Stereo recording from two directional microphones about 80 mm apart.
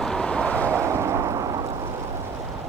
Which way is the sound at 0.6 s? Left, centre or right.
Right.